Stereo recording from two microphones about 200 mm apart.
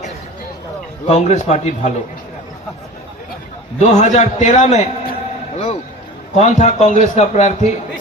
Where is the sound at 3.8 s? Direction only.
35° left (ahead or behind).